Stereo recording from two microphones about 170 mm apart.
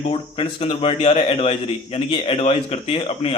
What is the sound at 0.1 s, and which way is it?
Speech, 35° left (ahead or behind).